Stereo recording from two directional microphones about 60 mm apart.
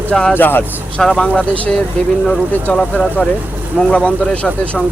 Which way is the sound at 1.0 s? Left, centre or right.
Centre.